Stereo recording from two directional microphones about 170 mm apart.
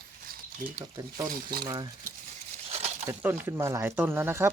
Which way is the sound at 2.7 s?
40° right (ahead or behind).